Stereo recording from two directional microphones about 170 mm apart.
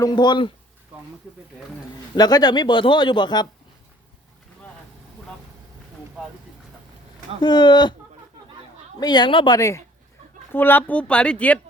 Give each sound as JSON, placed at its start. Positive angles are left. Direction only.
{"t": 0.0, "sound": "speech", "side_deg": 25}
{"t": 2.1, "sound": "speech", "side_deg": 25}
{"t": 7.4, "sound": "speech", "side_deg": 25}
{"t": 9.0, "sound": "speech", "side_deg": 25}